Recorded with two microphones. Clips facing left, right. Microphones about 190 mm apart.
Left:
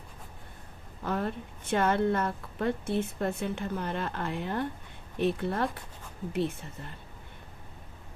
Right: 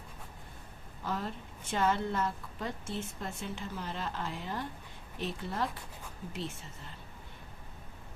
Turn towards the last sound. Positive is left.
turn(degrees=60)  # may be behind; listen again after turning